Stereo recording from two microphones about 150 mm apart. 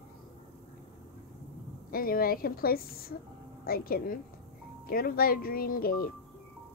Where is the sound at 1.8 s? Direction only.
75° left (ahead or behind).